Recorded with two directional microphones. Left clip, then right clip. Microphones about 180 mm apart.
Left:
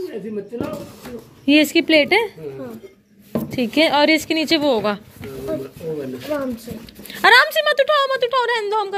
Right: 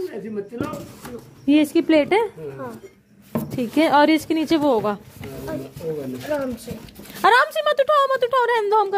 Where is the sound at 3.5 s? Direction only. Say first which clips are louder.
Even; 15° right (ahead or behind).